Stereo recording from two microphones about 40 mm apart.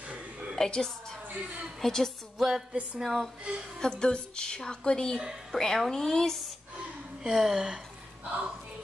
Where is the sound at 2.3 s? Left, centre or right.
Centre.